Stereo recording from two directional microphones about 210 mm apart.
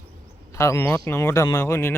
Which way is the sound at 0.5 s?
15° left (ahead or behind).